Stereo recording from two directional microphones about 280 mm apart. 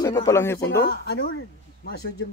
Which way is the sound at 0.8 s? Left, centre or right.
Left.